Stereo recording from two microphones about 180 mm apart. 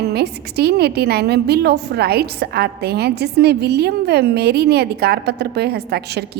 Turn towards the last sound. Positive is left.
turn(degrees=-65)  # may be behind; listen again after turning